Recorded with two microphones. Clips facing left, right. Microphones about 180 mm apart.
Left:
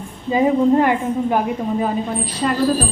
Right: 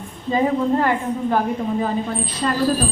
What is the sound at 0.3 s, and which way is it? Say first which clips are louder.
A woman's voice: left 4 dB; 15° left (ahead or behind).